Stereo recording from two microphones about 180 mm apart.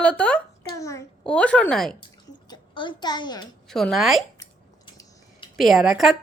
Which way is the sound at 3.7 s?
Centre (ahead or behind).